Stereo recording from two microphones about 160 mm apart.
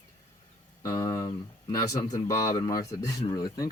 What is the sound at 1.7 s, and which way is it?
Speech, 20° left (ahead or behind).